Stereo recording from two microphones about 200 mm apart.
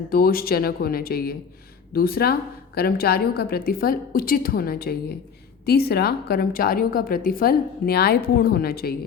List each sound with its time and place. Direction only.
0.1 s a woman's voice: 50° left (ahead or behind)